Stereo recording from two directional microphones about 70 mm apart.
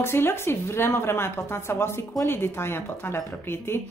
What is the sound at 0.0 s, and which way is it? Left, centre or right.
A woman's voice, left.